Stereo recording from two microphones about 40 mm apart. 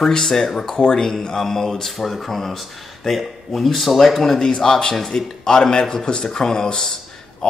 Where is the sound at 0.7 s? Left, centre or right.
Left.